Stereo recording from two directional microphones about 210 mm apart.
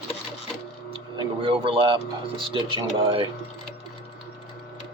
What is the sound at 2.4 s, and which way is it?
Speech, 25° right (ahead or behind).